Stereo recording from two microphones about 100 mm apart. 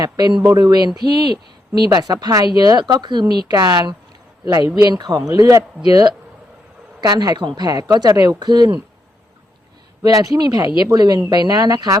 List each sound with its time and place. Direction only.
0.0 s a woman's voice: 40° right (ahead or behind)
10.0 s a woman's voice: 35° right (ahead or behind)